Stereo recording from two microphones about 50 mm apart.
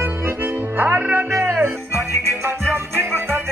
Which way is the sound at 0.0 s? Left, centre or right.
Right.